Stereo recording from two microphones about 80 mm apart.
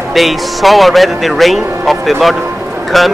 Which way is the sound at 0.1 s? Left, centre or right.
Centre.